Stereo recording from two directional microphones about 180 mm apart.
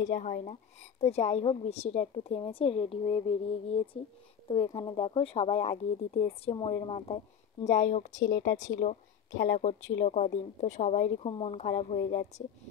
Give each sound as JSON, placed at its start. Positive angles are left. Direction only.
{"t": 0.0, "sound": "a woman's voice", "side_deg": 45}
{"t": 8.2, "sound": "speech", "side_deg": 90}
{"t": 9.5, "sound": "a woman's voice", "side_deg": 40}